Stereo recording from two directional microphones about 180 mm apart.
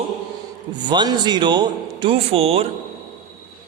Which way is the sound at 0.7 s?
25° right (ahead or behind).